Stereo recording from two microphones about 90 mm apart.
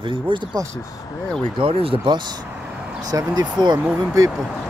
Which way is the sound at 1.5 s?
90° right.